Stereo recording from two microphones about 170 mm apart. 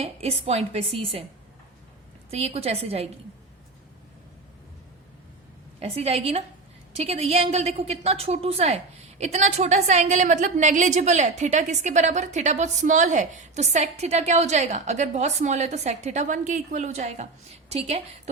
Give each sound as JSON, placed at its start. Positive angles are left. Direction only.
{"t": 0.0, "sound": "a woman's voice", "side_deg": -35}
{"t": 2.3, "sound": "a woman's voice", "side_deg": -35}
{"t": 5.8, "sound": "a woman's voice", "side_deg": -35}